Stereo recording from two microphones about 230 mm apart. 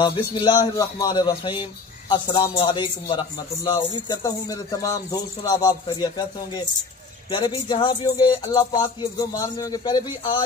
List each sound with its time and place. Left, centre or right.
0.0 s speech: centre